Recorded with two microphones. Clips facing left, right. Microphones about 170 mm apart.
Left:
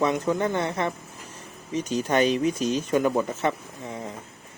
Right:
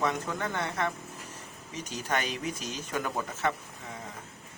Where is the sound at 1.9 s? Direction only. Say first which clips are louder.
Left 10 dB; 20° left (ahead or behind).